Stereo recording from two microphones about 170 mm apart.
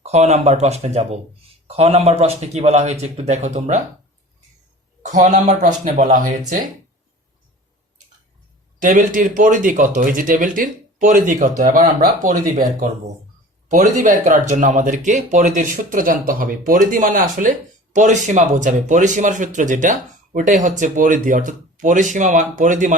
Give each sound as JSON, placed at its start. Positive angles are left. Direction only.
{"t": 0.0, "sound": "speech", "side_deg": -40}
{"t": 5.0, "sound": "speech", "side_deg": -45}
{"t": 8.8, "sound": "speech", "side_deg": -50}